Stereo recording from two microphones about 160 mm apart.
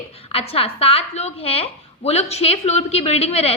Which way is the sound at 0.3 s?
35° left (ahead or behind).